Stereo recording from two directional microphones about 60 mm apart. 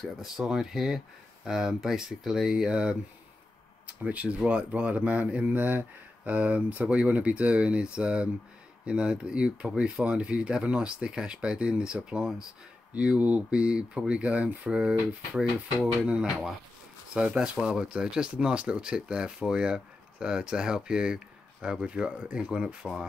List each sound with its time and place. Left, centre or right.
0.5 s speech: centre